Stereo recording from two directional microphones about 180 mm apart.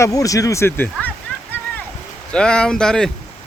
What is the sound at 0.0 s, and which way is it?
Speech, 20° left (ahead or behind).